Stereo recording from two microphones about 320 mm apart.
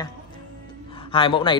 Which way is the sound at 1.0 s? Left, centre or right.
Centre.